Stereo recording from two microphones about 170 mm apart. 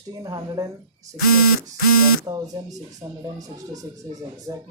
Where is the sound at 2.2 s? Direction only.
20° right (ahead or behind).